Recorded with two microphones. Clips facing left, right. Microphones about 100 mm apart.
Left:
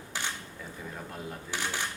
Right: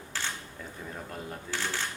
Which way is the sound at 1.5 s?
15° left (ahead or behind).